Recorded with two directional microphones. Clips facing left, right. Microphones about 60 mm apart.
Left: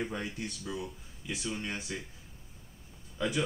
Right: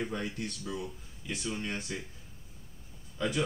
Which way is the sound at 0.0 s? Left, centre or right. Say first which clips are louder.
Right 1 dB; centre.